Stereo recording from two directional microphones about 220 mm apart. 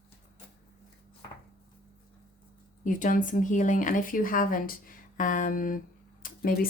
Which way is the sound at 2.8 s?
35° left (ahead or behind).